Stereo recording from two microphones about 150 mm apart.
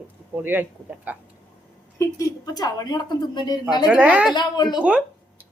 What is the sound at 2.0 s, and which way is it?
Speech, 20° left (ahead or behind).